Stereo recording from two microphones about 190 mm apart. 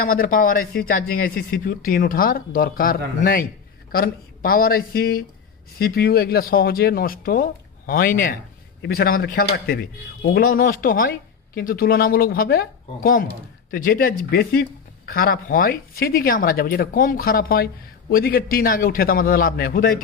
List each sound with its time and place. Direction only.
0.0 s speech: 50° left (ahead or behind)